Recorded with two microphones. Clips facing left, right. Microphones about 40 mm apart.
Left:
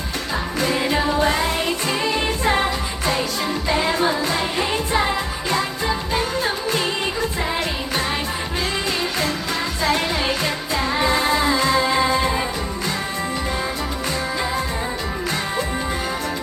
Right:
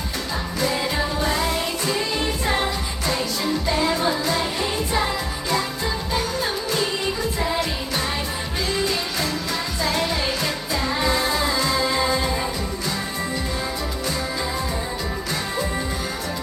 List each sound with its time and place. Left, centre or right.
0.6 s music: left
4.0 s music: centre
4.9 s music of asia: left
9.8 s music: left